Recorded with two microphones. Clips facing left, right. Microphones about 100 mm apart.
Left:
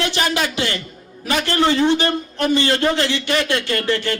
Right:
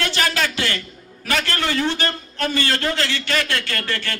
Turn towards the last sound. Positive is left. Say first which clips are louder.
# left 7 dB
turn(degrees=20)  # may be behind; listen again after turning